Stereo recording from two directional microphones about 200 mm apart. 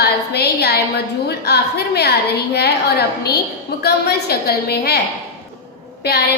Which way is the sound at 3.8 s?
55° left (ahead or behind).